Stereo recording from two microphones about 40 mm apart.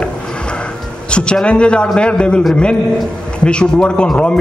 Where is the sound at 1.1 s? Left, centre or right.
Left.